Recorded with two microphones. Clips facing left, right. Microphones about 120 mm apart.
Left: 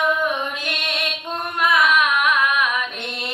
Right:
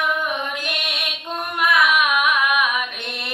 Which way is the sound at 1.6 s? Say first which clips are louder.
Even; 10° right (ahead or behind).